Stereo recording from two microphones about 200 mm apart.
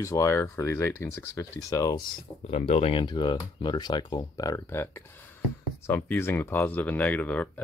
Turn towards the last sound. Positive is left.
turn(degrees=5)  # may be behind; listen again after turning